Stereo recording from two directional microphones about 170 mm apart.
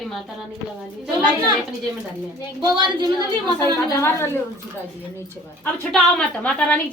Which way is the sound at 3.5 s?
15° left (ahead or behind).